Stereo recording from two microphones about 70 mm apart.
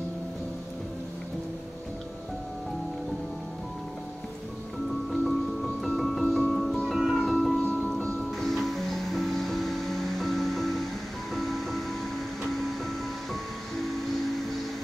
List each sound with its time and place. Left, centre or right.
5.1 s music: centre